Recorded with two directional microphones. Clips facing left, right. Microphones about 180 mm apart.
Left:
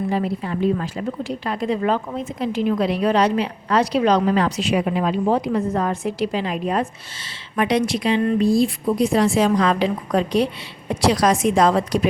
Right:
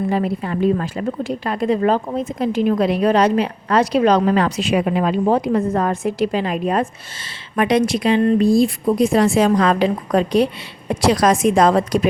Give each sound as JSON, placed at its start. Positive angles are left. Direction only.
{"t": 0.1, "sound": "a woman's voice", "side_deg": -55}